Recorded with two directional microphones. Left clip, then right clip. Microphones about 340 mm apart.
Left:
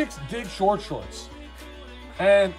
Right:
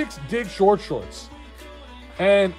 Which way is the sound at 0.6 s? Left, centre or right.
Right.